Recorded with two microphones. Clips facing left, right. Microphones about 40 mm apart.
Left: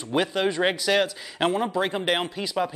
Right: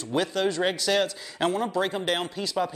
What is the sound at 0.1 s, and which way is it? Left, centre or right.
Speech, centre.